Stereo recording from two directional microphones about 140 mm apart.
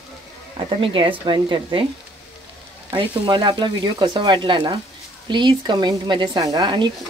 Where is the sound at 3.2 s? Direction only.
30° right (ahead or behind).